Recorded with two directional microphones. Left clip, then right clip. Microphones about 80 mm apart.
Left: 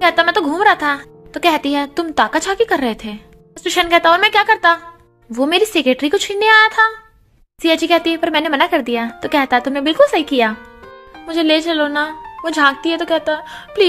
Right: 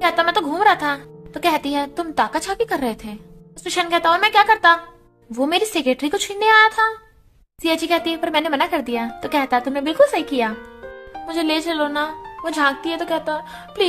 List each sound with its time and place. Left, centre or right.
0.0 s a sound: left
0.6 s speech: left
11.2 s speech: left